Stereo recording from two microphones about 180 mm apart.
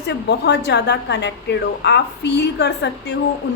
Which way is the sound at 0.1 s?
70° left (ahead or behind).